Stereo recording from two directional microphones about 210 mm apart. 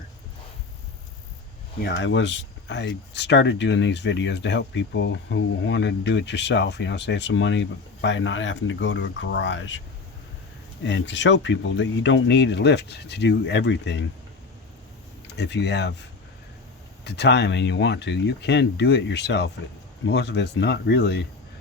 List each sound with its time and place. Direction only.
1.8 s speech: 60° left (ahead or behind)
10.8 s speech: 60° left (ahead or behind)
15.3 s speech: 55° left (ahead or behind)